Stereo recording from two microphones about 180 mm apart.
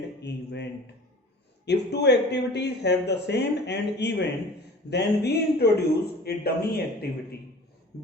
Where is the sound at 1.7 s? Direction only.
70° left (ahead or behind).